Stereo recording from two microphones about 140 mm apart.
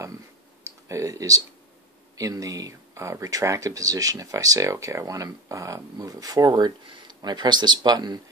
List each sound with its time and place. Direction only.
0.8 s speech: 20° right (ahead or behind)